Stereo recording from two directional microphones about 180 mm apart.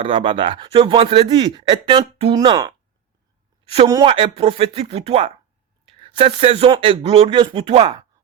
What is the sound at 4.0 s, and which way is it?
Speech, 30° right (ahead or behind).